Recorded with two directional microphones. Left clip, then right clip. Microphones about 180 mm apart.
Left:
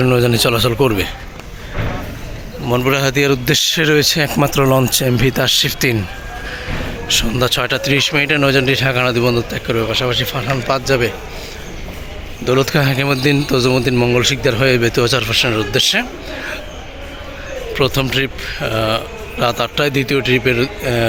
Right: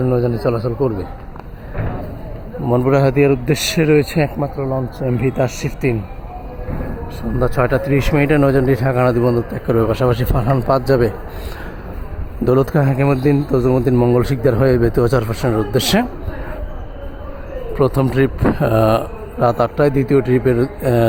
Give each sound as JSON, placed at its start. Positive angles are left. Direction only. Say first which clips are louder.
{"t": 0.0, "sound": "a man's voice", "louder": "left 4 dB", "side_deg": 5}
{"t": 2.6, "sound": "speech", "louder": "right 1 dB", "side_deg": -15}
{"t": 4.4, "sound": "speech", "louder": "left 7 dB", "side_deg": 35}
{"t": 4.9, "sound": "speech", "louder": "left 3 dB", "side_deg": 10}
{"t": 7.1, "sound": "speech", "louder": "left 6 dB", "side_deg": -5}
{"t": 12.5, "sound": "speech", "louder": "even", "side_deg": -20}
{"t": 12.7, "sound": "speech", "louder": "left 1 dB", "side_deg": -5}
{"t": 17.7, "sound": "speech", "louder": "even", "side_deg": -15}
{"t": 19.4, "sound": "speech", "louder": "right 2 dB", "side_deg": -15}